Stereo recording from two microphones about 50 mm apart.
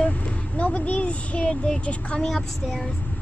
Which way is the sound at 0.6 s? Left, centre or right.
Left.